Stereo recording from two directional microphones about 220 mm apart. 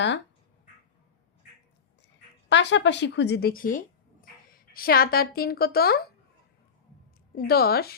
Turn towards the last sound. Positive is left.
turn(degrees=45)  # may be behind; listen again after turning